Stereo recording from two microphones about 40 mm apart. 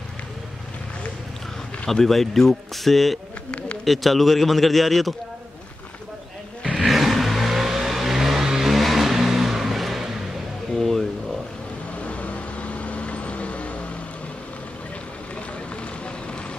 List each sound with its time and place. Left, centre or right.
2.0 s a man's voice: centre
6.6 s roar: right
6.9 s vehicle: centre
8.7 s vehicle: centre
10.8 s a sound: centre
12.1 s vehicle: left